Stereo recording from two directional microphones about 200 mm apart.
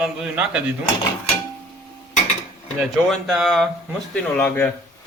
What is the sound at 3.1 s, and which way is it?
A man's voice, centre (ahead or behind).